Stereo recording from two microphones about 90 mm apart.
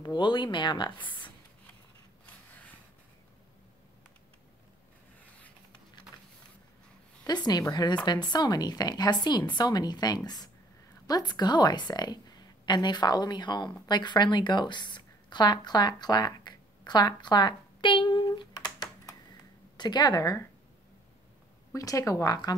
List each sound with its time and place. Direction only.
0.0 s speech: 55° left (ahead or behind)
5.2 s writing: 15° left (ahead or behind)
7.3 s a woman's voice: 50° left (ahead or behind); by 18.2 s 65° left (ahead or behind)
18.2 s computer keyboard: 55° left (ahead or behind)
19.8 s a woman's voice: 50° left (ahead or behind)
21.7 s speech: 40° left (ahead or behind)